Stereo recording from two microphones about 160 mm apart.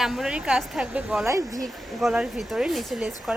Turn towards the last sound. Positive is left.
turn(degrees=-5)  # may be behind; listen again after turning